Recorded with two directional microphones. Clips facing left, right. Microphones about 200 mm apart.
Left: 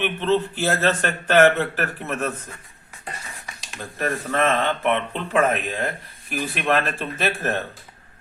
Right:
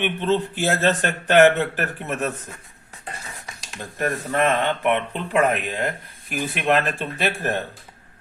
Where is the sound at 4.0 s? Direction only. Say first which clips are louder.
Right 1 dB; 15° right (ahead or behind).